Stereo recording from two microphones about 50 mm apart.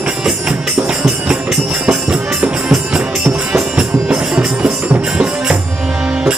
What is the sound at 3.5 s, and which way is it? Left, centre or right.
Music, right.